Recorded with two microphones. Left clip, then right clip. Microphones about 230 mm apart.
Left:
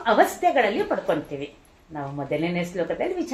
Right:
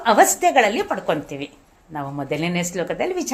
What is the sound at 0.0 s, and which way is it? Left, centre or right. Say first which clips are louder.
Speech: right 4 dB; right.